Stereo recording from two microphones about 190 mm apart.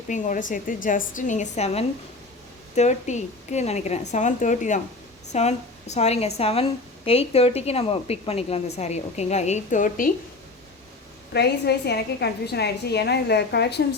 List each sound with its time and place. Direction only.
0.1 s a woman's voice: 45° left (ahead or behind)
11.3 s a woman's voice: 60° left (ahead or behind)